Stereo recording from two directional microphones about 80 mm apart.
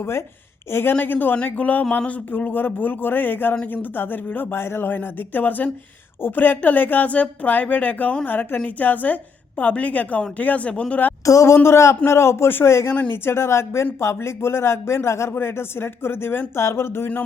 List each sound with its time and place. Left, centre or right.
0.0 s speech: left
3.5 s speech: centre
3.9 s speech: left
11.3 s speech: left